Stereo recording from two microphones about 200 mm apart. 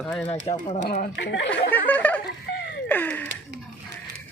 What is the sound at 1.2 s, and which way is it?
Speech, 60° left (ahead or behind).